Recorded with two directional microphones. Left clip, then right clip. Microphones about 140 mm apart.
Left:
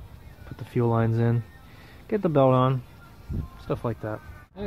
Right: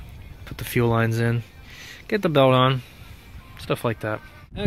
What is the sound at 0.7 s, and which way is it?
Speech, 10° right (ahead or behind).